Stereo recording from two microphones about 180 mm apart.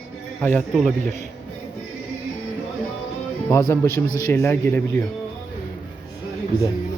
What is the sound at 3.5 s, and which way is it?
Speech, 15° left (ahead or behind).